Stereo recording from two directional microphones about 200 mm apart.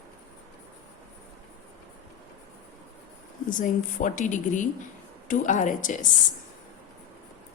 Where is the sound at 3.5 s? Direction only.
40° left (ahead or behind).